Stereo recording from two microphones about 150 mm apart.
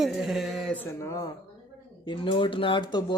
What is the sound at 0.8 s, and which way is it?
Speech, 20° left (ahead or behind).